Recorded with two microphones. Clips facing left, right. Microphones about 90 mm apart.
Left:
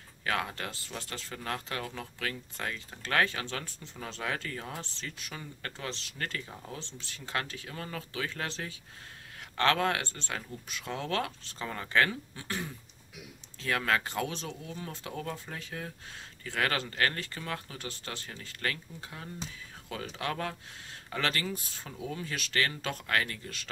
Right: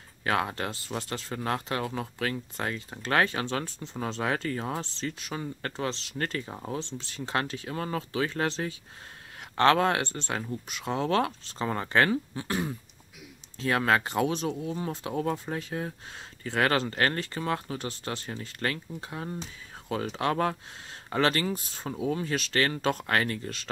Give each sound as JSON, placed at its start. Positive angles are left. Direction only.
{"t": 0.2, "sound": "speech", "side_deg": -30}
{"t": 13.6, "sound": "speech", "side_deg": -30}
{"t": 17.7, "sound": "speech", "side_deg": -20}